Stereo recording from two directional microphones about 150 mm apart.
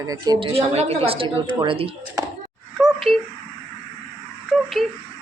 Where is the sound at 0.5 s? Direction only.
45° right (ahead or behind).